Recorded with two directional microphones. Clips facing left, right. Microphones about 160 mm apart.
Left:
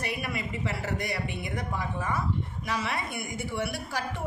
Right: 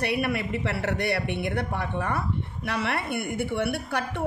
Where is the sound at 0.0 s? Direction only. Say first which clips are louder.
Right 7 dB; 65° right (ahead or behind).